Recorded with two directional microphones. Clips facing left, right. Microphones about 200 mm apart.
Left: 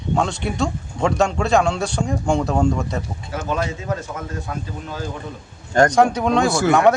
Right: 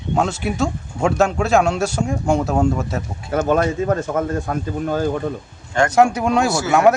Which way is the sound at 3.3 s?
55° right (ahead or behind).